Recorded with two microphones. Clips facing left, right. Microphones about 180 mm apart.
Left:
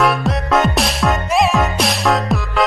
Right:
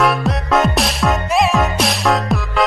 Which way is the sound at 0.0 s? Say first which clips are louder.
Even; centre (ahead or behind).